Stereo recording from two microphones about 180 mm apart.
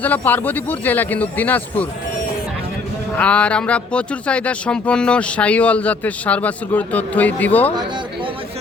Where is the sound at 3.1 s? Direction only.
5° left (ahead or behind).